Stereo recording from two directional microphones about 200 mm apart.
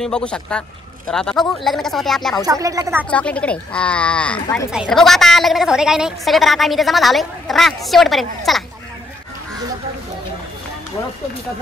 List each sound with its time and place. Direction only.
0.0 s a woman's voice: 5° left (ahead or behind)
2.4 s speech: 15° right (ahead or behind)
3.1 s a woman's voice: 5° left (ahead or behind)